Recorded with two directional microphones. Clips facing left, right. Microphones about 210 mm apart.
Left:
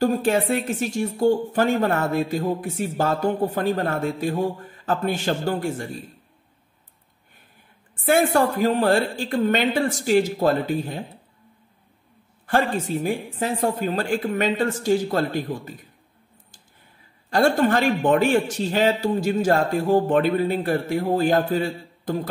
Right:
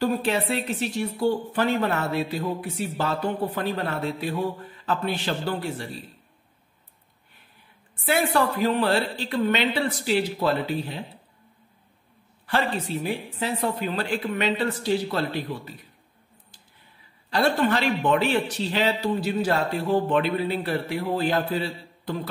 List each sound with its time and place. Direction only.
0.0 s speech: 45° left (ahead or behind)
8.0 s speech: 45° left (ahead or behind)
12.4 s speech: 45° left (ahead or behind)
17.3 s speech: 45° left (ahead or behind)